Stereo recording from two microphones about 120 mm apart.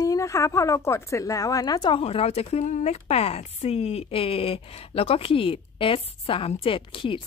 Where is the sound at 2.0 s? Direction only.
55° left (ahead or behind).